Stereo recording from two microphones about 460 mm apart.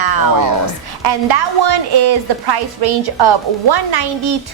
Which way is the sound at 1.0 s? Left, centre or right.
Right.